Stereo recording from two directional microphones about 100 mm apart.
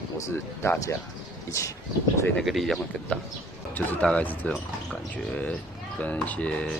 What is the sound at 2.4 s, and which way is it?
Speech, centre (ahead or behind).